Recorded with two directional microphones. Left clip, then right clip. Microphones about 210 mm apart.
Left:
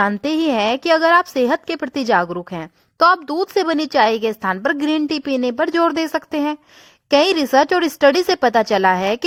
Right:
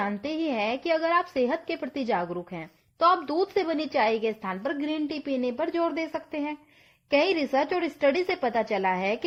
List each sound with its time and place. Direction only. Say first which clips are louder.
0.0 s a woman's voice: left 11 dB; 25° left (ahead or behind)